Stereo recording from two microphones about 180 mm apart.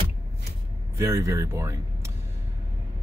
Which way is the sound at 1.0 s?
15° right (ahead or behind).